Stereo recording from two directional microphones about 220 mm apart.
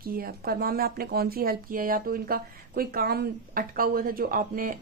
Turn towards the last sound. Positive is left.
turn(degrees=-40)  # may be behind; listen again after turning